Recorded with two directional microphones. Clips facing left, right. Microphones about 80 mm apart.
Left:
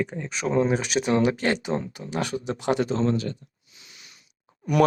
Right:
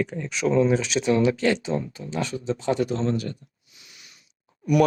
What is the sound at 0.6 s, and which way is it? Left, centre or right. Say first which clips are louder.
Speech: right 2 dB; left.